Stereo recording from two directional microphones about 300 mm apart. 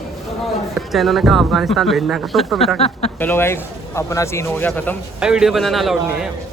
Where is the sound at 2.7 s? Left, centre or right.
Centre.